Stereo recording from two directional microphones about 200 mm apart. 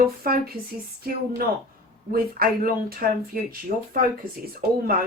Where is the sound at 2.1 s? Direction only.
50° right (ahead or behind).